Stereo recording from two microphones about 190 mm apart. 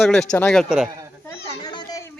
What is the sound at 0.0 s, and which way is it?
Speech, 5° left (ahead or behind).